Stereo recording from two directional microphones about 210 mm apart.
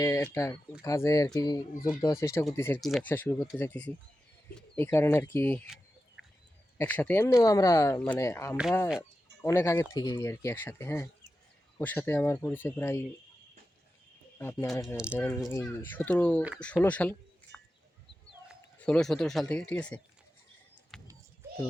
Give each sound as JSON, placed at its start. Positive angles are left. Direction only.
{"t": 0.0, "sound": "speech", "side_deg": 15}
{"t": 6.7, "sound": "speech", "side_deg": 10}
{"t": 14.3, "sound": "speech", "side_deg": 10}
{"t": 14.9, "sound": "speech", "side_deg": -5}
{"t": 15.2, "sound": "speech", "side_deg": 15}
{"t": 20.9, "sound": "a sound", "side_deg": 0}